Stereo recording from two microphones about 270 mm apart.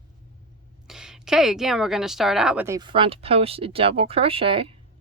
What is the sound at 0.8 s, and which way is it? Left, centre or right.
A woman's voice, centre.